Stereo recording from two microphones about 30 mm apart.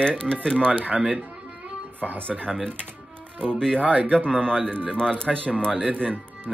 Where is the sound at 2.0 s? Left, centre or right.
Right.